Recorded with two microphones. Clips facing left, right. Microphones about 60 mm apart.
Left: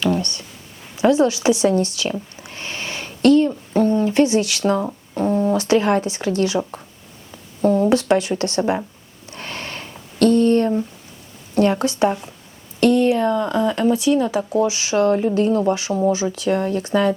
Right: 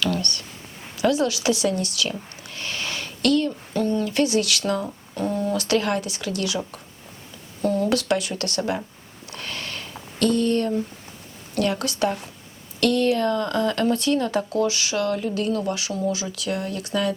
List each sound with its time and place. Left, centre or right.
0.0 s speech: left
9.3 s a sound: left
11.5 s speech: left; by 14.4 s centre
14.5 s speech: centre